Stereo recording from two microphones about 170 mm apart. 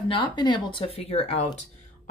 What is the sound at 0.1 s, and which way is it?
Speech, 25° left (ahead or behind).